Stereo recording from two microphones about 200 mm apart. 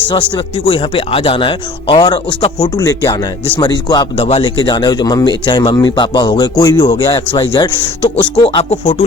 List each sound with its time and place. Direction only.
0.1 s speech: 25° left (ahead or behind)